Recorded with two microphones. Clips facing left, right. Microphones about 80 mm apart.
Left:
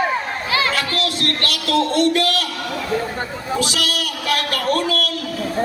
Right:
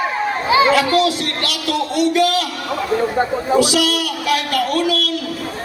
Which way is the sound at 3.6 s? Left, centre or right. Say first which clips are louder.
Right 6 dB; centre.